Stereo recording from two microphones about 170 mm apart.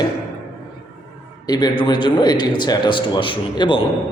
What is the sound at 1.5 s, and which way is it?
A man's voice, 25° left (ahead or behind).